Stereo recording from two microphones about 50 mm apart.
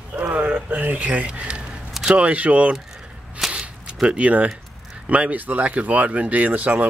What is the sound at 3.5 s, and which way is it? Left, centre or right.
Camera, right.